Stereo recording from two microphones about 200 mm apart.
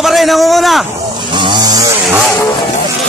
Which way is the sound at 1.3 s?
20° right (ahead or behind).